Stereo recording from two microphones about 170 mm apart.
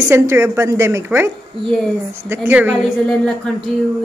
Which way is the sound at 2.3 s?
10° right (ahead or behind).